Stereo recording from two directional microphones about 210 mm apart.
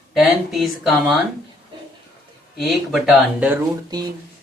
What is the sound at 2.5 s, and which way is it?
Speech, centre (ahead or behind).